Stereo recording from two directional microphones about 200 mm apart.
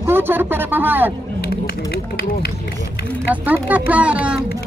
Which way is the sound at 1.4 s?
50° left (ahead or behind).